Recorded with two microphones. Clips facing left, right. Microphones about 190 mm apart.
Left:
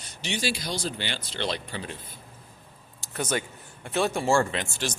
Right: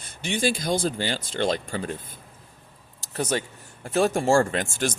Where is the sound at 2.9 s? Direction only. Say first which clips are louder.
Right 2 dB; 35° right (ahead or behind).